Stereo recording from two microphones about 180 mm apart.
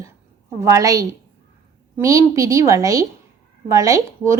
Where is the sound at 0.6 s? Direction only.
20° right (ahead or behind).